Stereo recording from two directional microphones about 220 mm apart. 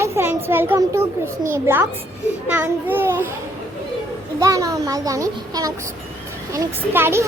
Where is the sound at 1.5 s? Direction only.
10° right (ahead or behind).